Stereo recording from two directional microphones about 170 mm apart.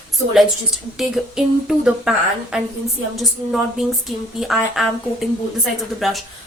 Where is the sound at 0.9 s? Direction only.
Centre (ahead or behind).